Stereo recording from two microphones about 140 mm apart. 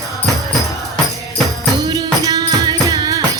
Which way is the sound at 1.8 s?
30° right (ahead or behind).